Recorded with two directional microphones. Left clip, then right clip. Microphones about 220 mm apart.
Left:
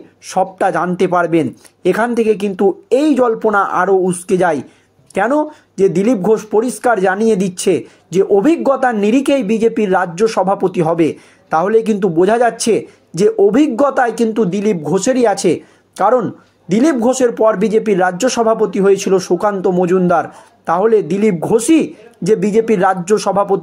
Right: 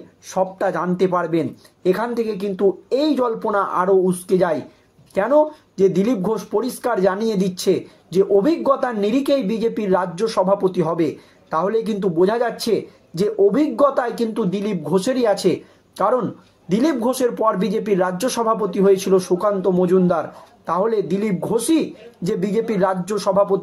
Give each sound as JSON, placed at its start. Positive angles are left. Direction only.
{"t": 0.3, "sound": "speech", "side_deg": 30}